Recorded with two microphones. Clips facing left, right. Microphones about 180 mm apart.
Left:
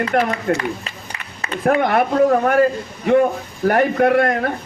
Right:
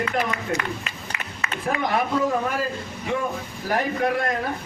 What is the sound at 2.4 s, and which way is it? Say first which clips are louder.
A man's voice: left 11 dB; 60° left (ahead or behind).